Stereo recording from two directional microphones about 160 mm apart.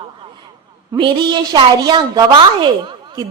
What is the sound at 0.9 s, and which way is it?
A woman's voice, 30° right (ahead or behind).